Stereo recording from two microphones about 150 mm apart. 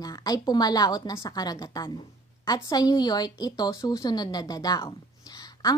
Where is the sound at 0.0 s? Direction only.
25° left (ahead or behind).